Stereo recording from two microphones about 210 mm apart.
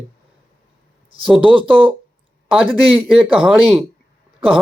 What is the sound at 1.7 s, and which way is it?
Speech, 25° right (ahead or behind).